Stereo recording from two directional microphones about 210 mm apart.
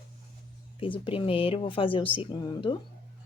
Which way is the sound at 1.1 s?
25° left (ahead or behind).